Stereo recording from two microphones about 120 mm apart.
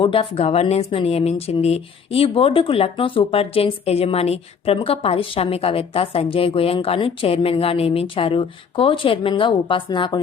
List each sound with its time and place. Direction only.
0.0 s speech: 50° left (ahead or behind)